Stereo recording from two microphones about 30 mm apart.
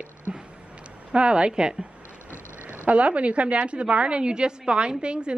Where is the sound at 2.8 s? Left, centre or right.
Right.